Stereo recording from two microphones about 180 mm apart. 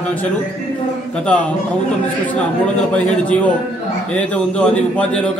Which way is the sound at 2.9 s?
5° left (ahead or behind).